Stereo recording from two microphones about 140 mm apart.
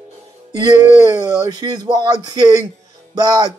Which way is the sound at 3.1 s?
30° right (ahead or behind).